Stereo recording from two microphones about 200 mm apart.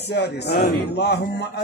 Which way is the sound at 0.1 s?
55° left (ahead or behind).